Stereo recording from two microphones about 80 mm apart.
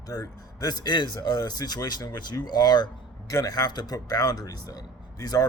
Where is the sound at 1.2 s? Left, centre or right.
Left.